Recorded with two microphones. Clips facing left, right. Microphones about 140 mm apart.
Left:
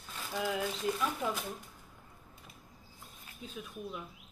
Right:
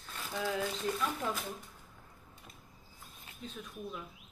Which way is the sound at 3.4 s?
5° left (ahead or behind).